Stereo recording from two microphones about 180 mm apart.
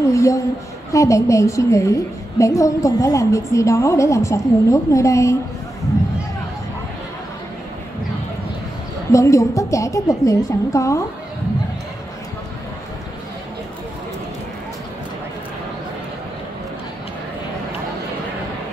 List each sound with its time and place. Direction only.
0.1 s a woman's voice: 15° left (ahead or behind)
9.1 s a woman's voice: 15° left (ahead or behind)